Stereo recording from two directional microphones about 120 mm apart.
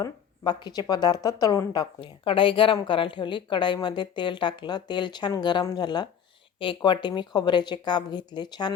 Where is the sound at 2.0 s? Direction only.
45° left (ahead or behind).